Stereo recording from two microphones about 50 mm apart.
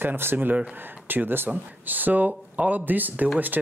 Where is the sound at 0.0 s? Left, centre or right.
Right.